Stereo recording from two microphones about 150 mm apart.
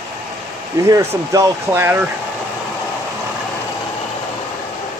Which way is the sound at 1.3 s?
15° right (ahead or behind).